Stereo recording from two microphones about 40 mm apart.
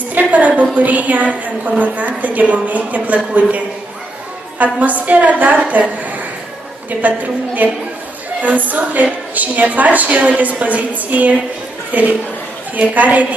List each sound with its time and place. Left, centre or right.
0.1 s a woman's voice: right
4.7 s a woman's voice: right
7.0 s a woman's voice: right